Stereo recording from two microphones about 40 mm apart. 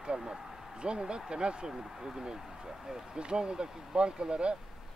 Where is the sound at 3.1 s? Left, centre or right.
Right.